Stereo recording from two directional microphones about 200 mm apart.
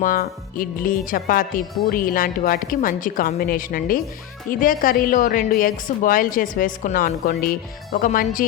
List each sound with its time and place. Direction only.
0.0 s a woman's voice: 45° left (ahead or behind)